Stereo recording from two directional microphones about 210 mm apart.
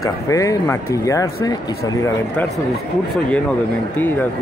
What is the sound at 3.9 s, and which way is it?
Speech, 10° left (ahead or behind).